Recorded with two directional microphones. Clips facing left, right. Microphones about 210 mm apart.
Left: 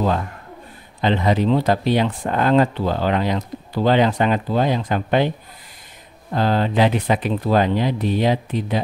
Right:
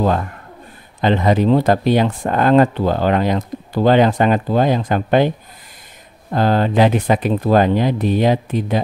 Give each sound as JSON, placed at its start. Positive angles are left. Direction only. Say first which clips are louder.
{"t": 1.0, "sound": "speech", "louder": "right 3 dB", "side_deg": -50}
{"t": 6.3, "sound": "speech", "louder": "right 3 dB", "side_deg": -50}